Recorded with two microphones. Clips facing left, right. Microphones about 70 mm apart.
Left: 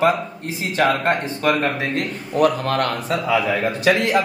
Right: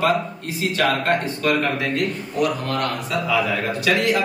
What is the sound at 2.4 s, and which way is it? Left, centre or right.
Speech, left.